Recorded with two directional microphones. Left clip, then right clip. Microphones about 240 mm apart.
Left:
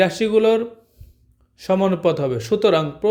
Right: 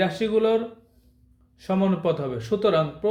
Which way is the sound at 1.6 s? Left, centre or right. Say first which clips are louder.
Left 7 dB; left.